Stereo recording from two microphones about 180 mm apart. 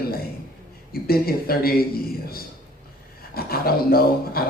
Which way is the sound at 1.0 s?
55° left (ahead or behind).